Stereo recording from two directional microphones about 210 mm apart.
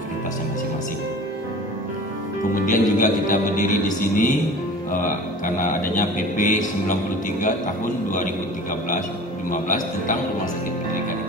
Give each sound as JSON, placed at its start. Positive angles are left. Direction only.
{"t": 2.5, "sound": "speech", "side_deg": 40}
{"t": 5.6, "sound": "speech", "side_deg": 40}
{"t": 9.5, "sound": "speech", "side_deg": 40}